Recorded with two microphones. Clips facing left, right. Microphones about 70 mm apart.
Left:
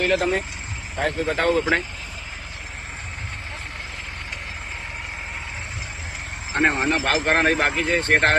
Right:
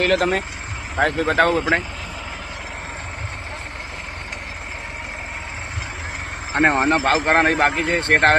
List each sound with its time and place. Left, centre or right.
0.0 s speech: right
0.9 s speech: right
6.5 s a man's voice: right